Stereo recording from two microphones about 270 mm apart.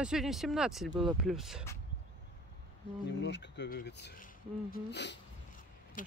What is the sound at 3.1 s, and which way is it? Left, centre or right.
Speech, left.